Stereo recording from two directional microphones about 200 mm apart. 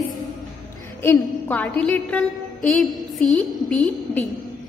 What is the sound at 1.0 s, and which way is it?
A woman's voice, 10° left (ahead or behind).